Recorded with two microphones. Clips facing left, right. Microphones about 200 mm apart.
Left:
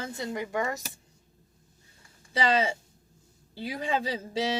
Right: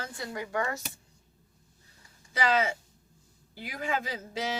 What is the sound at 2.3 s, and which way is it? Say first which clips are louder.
Speech: left 1 dB; 30° left (ahead or behind).